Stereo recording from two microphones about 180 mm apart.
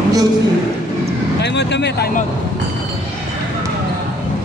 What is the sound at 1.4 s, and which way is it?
Speech, 70° left (ahead or behind).